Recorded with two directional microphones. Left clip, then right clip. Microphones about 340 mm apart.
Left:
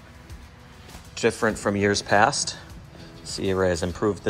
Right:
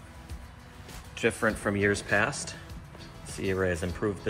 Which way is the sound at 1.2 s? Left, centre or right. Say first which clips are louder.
Left 5 dB; centre.